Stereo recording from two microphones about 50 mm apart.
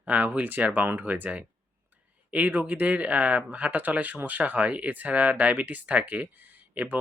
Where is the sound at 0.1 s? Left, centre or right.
Right.